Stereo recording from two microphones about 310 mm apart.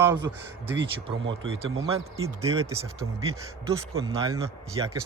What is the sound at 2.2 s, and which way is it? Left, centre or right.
Speech, centre.